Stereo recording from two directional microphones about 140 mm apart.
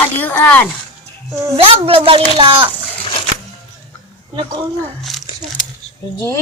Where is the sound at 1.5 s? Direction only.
40° right (ahead or behind).